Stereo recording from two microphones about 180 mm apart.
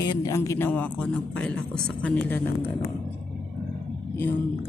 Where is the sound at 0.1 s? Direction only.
20° left (ahead or behind).